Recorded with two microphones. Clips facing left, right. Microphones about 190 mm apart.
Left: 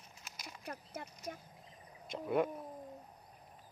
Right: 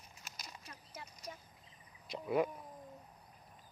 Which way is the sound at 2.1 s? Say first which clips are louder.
Even; centre (ahead or behind).